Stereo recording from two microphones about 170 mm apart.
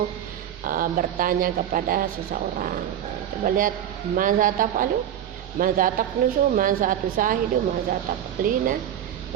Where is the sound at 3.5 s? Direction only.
55° right (ahead or behind).